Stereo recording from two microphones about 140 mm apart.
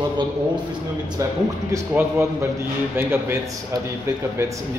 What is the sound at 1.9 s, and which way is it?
A man's voice, 20° right (ahead or behind).